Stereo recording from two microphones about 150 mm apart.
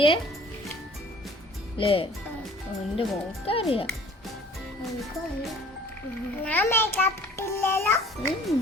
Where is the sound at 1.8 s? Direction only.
35° left (ahead or behind).